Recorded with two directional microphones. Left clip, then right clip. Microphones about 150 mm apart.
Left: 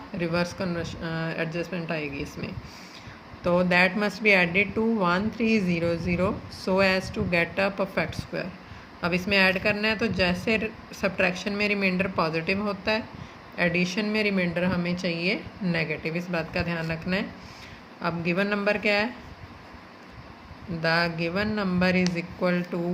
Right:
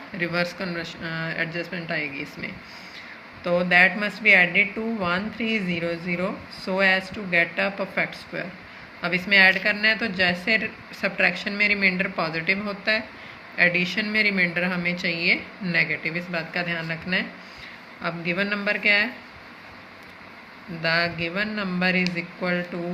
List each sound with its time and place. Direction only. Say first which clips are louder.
0.2 s speech: right 2 dB; 55° left (ahead or behind)
3.4 s speech: right 3 dB; 75° left (ahead or behind)
20.8 s a sound: right 1 dB; 75° left (ahead or behind)
22.1 s speech: even; 90° left